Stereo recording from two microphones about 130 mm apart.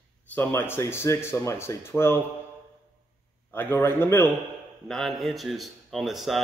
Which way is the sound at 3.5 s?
15° left (ahead or behind).